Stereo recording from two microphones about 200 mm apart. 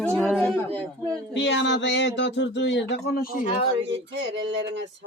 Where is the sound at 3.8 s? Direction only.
65° right (ahead or behind).